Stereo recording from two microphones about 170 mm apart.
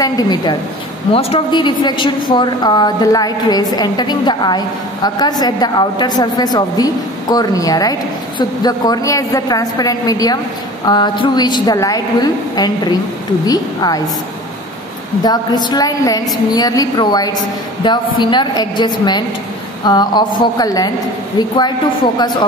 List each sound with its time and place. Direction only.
0.0 s a woman's voice: 25° left (ahead or behind)
15.2 s a woman's voice: 25° left (ahead or behind)